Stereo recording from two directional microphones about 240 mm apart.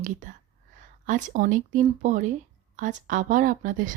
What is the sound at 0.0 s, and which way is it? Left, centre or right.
Speech, right.